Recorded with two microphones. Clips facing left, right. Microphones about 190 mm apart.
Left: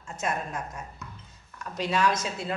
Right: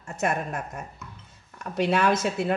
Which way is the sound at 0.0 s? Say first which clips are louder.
Right 4 dB; 65° right (ahead or behind).